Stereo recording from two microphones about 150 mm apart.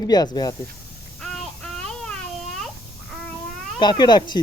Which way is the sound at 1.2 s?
Centre (ahead or behind).